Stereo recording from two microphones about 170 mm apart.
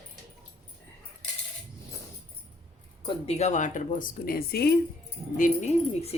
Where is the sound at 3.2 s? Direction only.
40° left (ahead or behind); by 4.7 s 65° left (ahead or behind).